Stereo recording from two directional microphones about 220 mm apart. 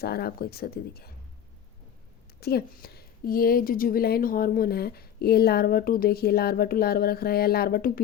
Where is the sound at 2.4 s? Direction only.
45° left (ahead or behind).